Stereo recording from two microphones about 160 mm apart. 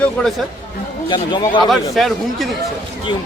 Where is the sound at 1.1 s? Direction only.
30° left (ahead or behind).